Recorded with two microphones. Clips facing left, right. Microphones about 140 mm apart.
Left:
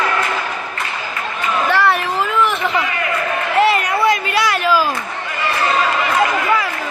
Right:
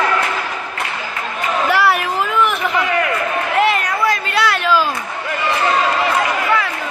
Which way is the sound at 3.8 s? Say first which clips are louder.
Left 2 dB; 20° left (ahead or behind).